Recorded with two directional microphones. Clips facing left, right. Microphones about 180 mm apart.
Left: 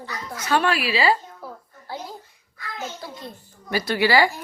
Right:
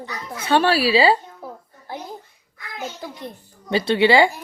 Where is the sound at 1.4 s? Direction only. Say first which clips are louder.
Right 2 dB; 20° right (ahead or behind).